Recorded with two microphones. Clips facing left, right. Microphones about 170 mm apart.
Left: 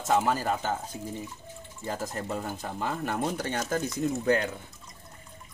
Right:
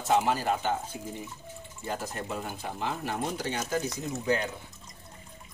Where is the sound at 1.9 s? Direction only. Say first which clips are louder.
Left 1 dB; 35° left (ahead or behind).